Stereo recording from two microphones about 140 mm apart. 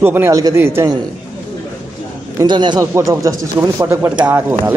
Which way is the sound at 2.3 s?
35° right (ahead or behind).